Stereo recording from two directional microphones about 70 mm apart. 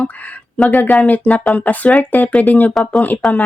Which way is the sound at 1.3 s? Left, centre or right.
Centre.